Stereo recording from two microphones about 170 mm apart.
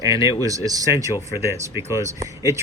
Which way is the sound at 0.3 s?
20° right (ahead or behind).